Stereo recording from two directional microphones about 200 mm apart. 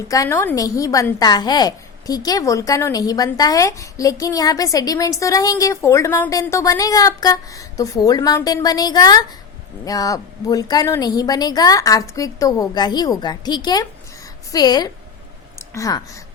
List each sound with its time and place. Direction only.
0.1 s a woman's voice: 15° left (ahead or behind)